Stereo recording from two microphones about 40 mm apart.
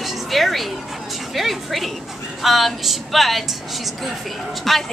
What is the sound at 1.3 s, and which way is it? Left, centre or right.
A woman's voice, centre.